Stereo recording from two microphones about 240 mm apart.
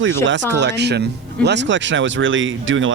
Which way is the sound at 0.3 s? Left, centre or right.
Right.